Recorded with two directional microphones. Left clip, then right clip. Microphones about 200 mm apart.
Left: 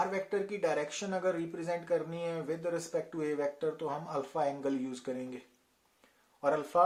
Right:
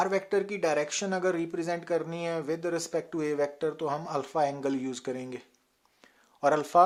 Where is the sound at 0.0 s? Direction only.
40° right (ahead or behind).